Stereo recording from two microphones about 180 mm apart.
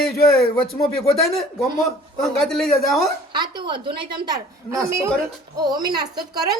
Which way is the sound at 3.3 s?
25° right (ahead or behind).